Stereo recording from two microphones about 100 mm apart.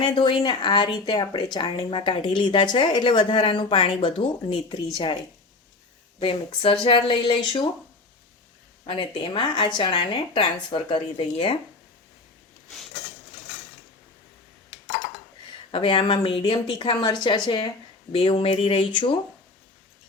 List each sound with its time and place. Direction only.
0.0 s speech: 50° left (ahead or behind)
6.1 s speech: 65° left (ahead or behind)
8.9 s speech: 60° left (ahead or behind)
15.7 s speech: 60° left (ahead or behind)
18.1 s speech: 65° left (ahead or behind)